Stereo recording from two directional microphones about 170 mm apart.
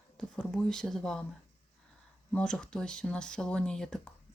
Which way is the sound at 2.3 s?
5° left (ahead or behind).